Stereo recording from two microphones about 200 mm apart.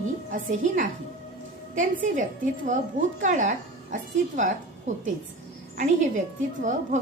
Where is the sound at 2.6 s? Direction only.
40° right (ahead or behind).